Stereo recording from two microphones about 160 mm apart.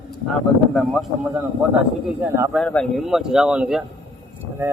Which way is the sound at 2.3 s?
15° right (ahead or behind).